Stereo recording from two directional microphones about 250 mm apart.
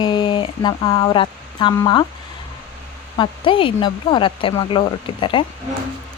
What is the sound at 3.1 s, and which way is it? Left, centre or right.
Speech, centre.